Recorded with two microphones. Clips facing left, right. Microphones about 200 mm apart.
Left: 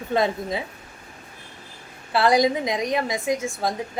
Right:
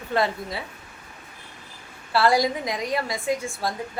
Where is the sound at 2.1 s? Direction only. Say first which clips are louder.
Left 2 dB; 20° left (ahead or behind).